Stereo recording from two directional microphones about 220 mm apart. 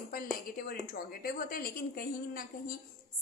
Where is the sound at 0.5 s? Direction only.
40° left (ahead or behind).